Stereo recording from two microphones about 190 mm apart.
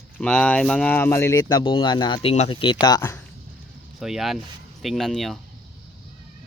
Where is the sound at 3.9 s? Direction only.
Centre (ahead or behind).